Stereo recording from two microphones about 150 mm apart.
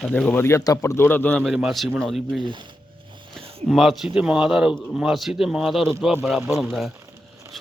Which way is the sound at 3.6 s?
Centre (ahead or behind).